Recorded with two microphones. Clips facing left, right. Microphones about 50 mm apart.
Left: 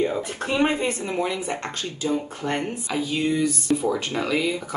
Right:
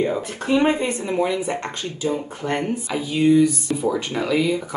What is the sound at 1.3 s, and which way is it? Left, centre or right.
Speech, right.